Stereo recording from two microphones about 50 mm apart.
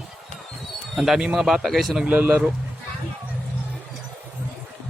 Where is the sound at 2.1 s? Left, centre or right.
Right.